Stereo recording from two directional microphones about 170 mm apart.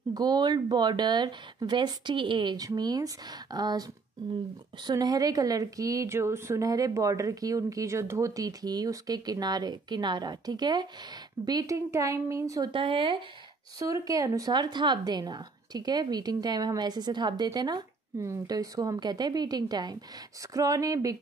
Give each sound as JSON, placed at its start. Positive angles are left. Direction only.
{"t": 0.1, "sound": "a woman's voice", "side_deg": -25}
{"t": 4.8, "sound": "a woman's voice", "side_deg": -25}
{"t": 13.7, "sound": "a woman's voice", "side_deg": -20}